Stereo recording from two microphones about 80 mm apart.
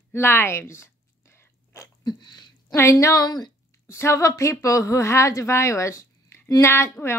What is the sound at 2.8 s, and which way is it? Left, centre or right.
Speech, left.